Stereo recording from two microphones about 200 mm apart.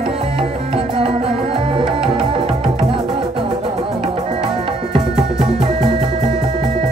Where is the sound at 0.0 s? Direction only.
25° right (ahead or behind).